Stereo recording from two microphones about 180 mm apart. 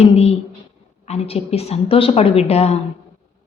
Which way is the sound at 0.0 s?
35° left (ahead or behind).